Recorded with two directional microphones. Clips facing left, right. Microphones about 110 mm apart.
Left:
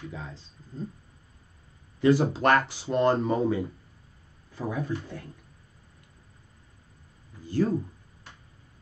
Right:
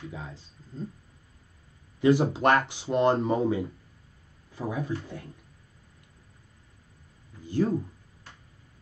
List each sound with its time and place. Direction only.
0.1 s speech: 15° right (ahead or behind)
2.0 s speech: 15° right (ahead or behind)
7.4 s speech: 15° right (ahead or behind)